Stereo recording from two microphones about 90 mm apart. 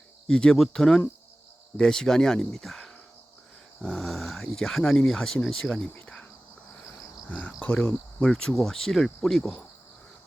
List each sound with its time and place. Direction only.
0.3 s speech: 10° left (ahead or behind)
7.3 s speech: 15° left (ahead or behind)